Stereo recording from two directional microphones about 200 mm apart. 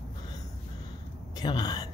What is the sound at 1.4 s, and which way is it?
Speech, 20° left (ahead or behind).